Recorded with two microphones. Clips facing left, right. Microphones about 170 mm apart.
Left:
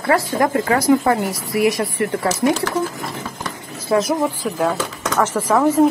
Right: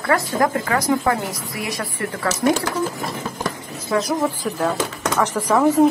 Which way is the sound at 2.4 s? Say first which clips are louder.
Even; 15° left (ahead or behind).